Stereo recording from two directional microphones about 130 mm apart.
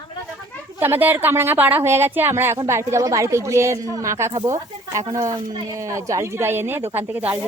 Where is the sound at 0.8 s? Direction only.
15° right (ahead or behind).